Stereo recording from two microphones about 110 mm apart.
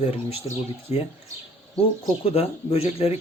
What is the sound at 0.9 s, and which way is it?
Speech, 25° right (ahead or behind).